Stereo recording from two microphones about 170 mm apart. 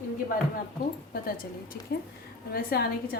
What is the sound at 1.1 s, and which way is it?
A woman's voice, 60° left (ahead or behind).